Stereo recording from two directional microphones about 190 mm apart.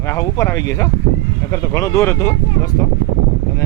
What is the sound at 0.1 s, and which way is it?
Speech, 15° left (ahead or behind).